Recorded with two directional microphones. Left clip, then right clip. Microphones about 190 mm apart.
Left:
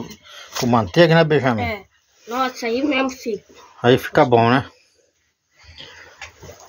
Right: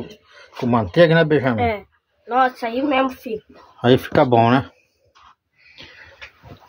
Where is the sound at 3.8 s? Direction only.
10° right (ahead or behind).